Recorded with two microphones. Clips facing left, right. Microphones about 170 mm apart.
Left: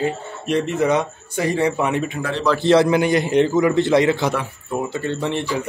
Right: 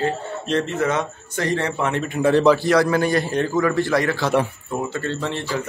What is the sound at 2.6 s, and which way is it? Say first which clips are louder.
A man's voice: left 3 dB; 25° left (ahead or behind).